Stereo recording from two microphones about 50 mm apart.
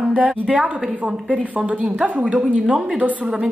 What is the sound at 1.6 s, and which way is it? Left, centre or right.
Speech, centre.